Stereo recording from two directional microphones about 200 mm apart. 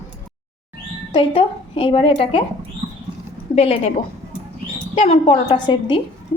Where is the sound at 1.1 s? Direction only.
25° left (ahead or behind).